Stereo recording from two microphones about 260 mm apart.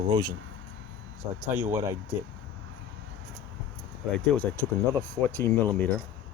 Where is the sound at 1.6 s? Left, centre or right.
Centre.